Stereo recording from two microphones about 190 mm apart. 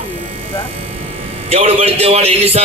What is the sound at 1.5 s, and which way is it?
Speech, 30° right (ahead or behind).